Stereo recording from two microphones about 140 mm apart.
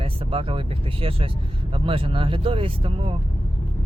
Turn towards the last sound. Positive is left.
turn(degrees=-40)  # may be behind; listen again after turning